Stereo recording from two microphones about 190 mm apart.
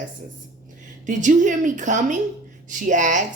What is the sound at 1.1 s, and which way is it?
A woman's voice, 40° right (ahead or behind).